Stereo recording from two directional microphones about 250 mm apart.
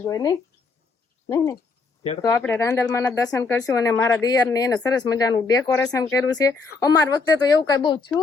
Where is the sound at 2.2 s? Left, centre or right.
Centre.